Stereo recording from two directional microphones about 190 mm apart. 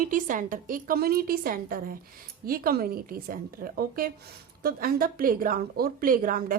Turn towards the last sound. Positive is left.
turn(degrees=-50)  # may be behind; listen again after turning